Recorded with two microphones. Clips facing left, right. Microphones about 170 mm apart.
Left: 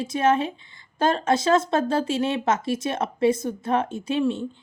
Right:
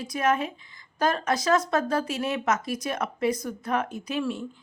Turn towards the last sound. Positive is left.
turn(degrees=25)  # may be behind; listen again after turning